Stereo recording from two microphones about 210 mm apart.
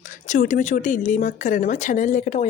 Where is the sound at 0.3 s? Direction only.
40° left (ahead or behind).